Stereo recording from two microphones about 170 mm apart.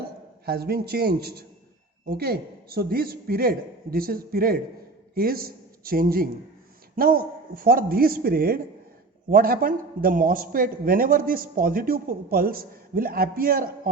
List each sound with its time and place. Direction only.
0.4 s a man's voice: 65° right (ahead or behind)